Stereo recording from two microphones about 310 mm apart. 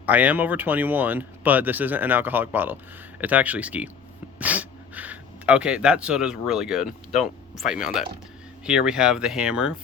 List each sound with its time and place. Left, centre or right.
0.0 s speech: centre